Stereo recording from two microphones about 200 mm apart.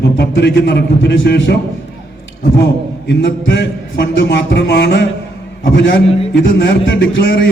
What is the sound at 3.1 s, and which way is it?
A man's voice, 65° left (ahead or behind).